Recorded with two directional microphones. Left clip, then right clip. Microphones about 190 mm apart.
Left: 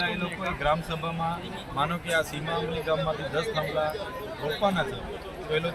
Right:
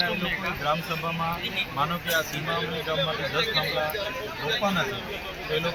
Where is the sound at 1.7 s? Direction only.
20° left (ahead or behind).